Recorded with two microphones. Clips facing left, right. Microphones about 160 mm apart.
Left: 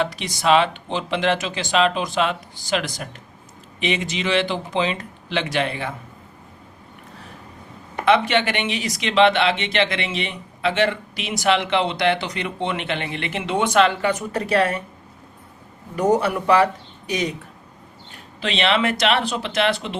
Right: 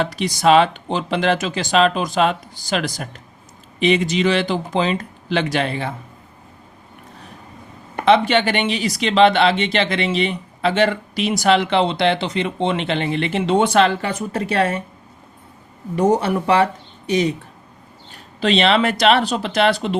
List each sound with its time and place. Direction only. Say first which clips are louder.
0.0 s speech: right 5 dB; 40° right (ahead or behind)
8.0 s speech: right 3 dB; 30° right (ahead or behind)
16.0 s speech: right 2 dB; 25° right (ahead or behind)
18.3 s speech: right 5 dB; 35° right (ahead or behind)